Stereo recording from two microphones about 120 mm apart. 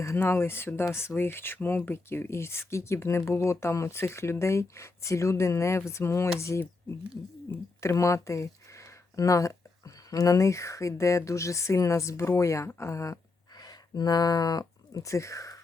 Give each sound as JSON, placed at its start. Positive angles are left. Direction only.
{"t": 0.0, "sound": "speech", "side_deg": 20}
{"t": 7.8, "sound": "speech", "side_deg": 25}